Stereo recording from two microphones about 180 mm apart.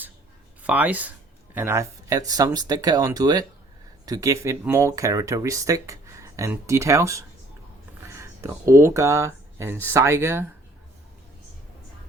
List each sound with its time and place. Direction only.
0.6 s speech: 10° right (ahead or behind)
8.0 s a sound: 15° right (ahead or behind)
8.7 s speech: 15° right (ahead or behind)